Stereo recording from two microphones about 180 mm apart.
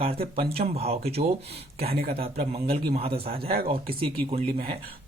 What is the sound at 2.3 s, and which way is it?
Speech, 35° right (ahead or behind).